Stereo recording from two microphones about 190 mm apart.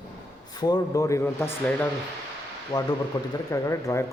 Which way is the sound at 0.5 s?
20° left (ahead or behind).